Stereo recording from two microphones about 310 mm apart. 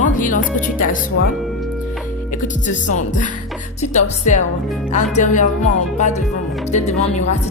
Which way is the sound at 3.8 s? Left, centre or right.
Left.